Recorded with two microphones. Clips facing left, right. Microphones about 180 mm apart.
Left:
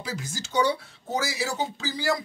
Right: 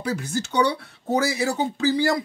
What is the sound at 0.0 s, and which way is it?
Speech, 60° right (ahead or behind).